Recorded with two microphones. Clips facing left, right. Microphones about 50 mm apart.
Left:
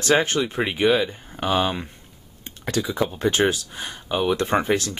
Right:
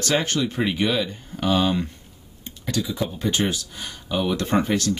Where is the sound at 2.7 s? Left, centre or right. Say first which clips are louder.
Left 2 dB; left.